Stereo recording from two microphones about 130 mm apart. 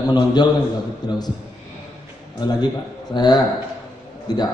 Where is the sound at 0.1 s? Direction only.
30° left (ahead or behind).